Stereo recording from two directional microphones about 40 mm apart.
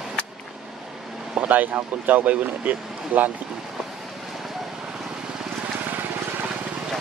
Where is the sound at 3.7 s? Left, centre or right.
Centre.